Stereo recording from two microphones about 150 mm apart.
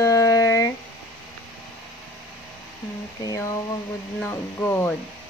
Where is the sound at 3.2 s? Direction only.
25° left (ahead or behind).